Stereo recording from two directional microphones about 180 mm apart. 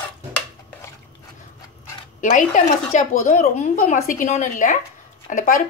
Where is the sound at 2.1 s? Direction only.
45° left (ahead or behind).